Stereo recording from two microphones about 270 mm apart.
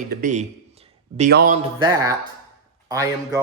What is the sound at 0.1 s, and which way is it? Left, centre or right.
A man's voice, right.